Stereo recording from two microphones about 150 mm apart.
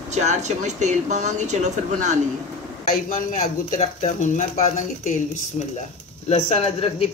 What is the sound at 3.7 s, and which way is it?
Speech, 50° left (ahead or behind).